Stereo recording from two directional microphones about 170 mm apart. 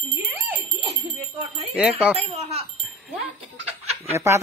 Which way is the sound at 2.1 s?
40° right (ahead or behind).